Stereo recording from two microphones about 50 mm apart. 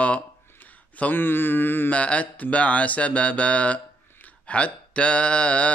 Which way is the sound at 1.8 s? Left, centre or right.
Left.